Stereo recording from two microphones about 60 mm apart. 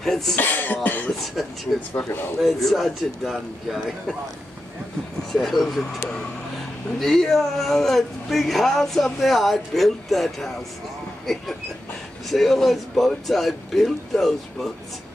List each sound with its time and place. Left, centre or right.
0.0 s speech: centre
0.4 s speech: left
1.1 s speech: centre
2.0 s speech: centre
2.4 s speech: centre
5.3 s speech: centre
7.0 s speech: centre
12.3 s speech: centre